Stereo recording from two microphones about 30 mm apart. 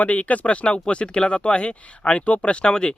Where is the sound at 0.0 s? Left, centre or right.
Left.